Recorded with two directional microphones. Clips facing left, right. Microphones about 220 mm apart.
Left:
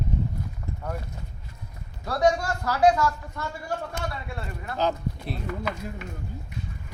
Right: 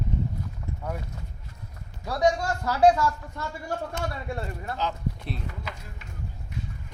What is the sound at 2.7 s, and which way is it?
Speech, 30° right (ahead or behind).